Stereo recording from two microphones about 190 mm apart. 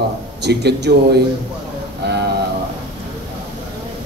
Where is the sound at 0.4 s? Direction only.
60° right (ahead or behind).